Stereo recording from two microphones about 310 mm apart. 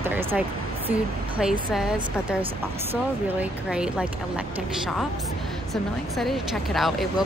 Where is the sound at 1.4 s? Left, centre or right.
Centre.